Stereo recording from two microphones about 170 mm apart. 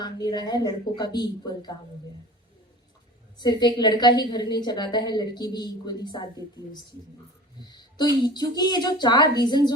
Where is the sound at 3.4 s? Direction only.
25° left (ahead or behind).